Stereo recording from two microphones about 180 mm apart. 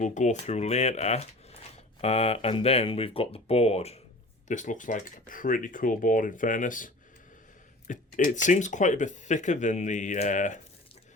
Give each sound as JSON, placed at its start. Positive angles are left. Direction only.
{"t": 0.0, "sound": "speech", "side_deg": 40}